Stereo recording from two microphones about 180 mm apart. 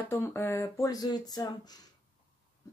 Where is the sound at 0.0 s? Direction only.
10° left (ahead or behind).